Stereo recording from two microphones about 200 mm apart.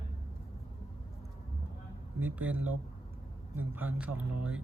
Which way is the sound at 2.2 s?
10° right (ahead or behind).